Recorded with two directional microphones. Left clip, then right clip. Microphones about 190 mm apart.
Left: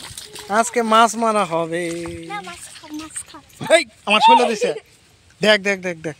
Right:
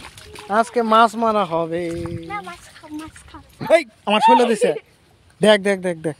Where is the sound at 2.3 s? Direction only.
Centre (ahead or behind).